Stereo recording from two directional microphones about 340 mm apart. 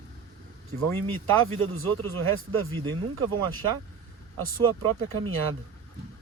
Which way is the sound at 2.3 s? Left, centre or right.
Right.